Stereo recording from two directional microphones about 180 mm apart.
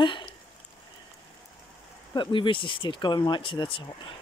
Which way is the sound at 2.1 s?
25° left (ahead or behind).